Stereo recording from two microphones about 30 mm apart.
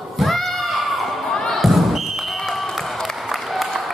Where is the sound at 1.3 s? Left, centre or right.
Centre.